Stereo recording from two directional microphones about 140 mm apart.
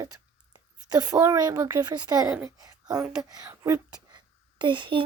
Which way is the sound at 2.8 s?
5° right (ahead or behind).